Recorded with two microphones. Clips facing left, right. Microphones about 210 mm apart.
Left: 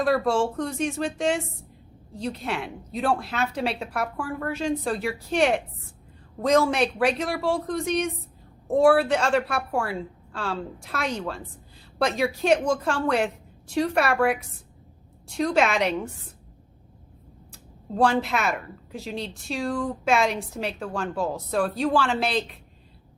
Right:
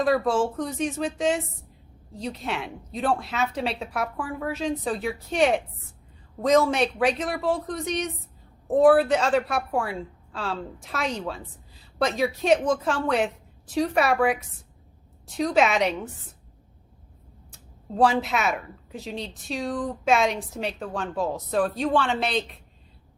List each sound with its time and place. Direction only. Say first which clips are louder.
0.0 s a woman's voice: even; centre (ahead or behind)
17.9 s a woman's voice: even; centre (ahead or behind)